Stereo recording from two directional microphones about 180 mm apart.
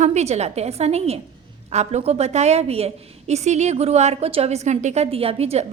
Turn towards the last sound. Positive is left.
turn(degrees=-35)  # may be behind; listen again after turning